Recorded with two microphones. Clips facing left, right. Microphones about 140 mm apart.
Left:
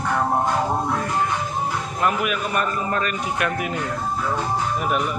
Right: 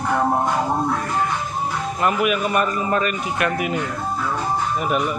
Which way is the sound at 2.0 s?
5° right (ahead or behind).